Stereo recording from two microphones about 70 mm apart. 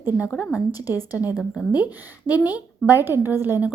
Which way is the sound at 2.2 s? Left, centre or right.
Left.